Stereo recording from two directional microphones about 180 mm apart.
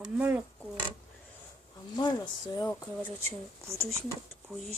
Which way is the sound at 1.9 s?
25° left (ahead or behind).